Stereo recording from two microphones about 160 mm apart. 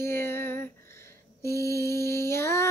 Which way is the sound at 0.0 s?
15° left (ahead or behind).